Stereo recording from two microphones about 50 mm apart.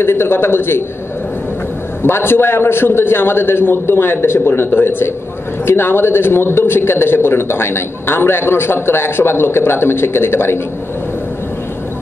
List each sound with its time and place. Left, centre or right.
0.0 s a man's voice: left
2.0 s a man's voice: left